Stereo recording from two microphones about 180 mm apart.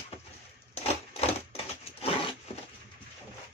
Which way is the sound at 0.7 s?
35° left (ahead or behind).